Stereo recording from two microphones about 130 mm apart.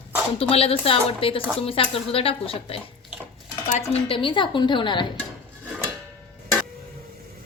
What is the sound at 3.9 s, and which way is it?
A woman's voice, 45° left (ahead or behind).